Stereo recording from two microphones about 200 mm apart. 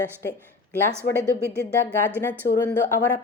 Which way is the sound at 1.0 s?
45° left (ahead or behind).